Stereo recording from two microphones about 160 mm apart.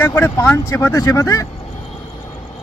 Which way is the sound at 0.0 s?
15° left (ahead or behind).